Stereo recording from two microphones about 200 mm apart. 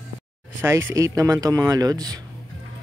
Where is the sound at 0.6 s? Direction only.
15° right (ahead or behind).